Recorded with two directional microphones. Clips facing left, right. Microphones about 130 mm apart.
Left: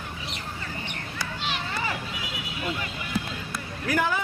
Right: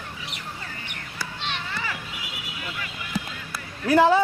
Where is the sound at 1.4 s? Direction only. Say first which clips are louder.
Even; 5° left (ahead or behind).